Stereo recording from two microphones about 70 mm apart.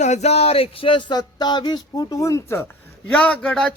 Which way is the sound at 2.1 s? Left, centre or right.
Left.